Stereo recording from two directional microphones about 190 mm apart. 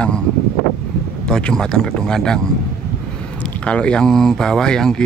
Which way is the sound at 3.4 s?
5° left (ahead or behind).